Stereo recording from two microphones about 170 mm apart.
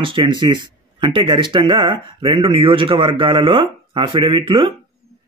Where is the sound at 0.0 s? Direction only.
30° right (ahead or behind).